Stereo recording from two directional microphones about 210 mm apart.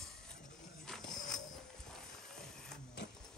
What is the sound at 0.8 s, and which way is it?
Music, centre (ahead or behind).